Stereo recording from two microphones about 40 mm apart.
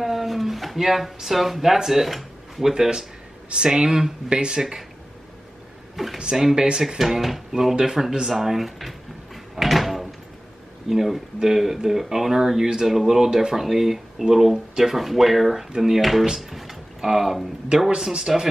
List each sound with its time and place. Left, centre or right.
0.0 s speech: centre
2.7 s speech: centre
6.0 s speech: centre
6.5 s speech: centre
7.0 s speech: centre
8.3 s drawer open or close: centre
10.9 s speech: centre